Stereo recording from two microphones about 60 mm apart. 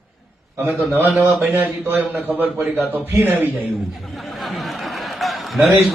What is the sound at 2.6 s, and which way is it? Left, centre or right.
Speech, right.